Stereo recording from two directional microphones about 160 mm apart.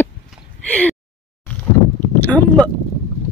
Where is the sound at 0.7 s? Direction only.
10° left (ahead or behind).